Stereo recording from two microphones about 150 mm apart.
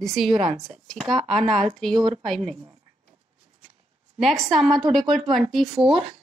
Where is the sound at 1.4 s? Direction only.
Centre (ahead or behind).